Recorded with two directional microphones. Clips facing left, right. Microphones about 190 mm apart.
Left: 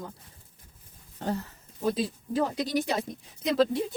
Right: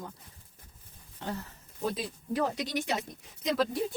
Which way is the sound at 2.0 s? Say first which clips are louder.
Left 3 dB; 30° left (ahead or behind).